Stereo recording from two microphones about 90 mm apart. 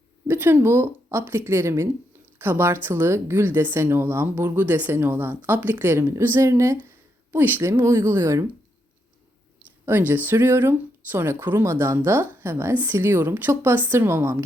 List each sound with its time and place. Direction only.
0.3 s speech: 20° right (ahead or behind)
7.3 s speech: 20° right (ahead or behind)
9.8 s speech: 20° right (ahead or behind)